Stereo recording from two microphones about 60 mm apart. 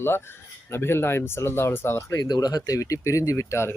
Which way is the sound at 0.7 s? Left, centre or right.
Left.